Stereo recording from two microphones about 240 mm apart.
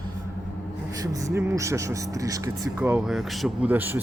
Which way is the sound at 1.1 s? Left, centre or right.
Centre.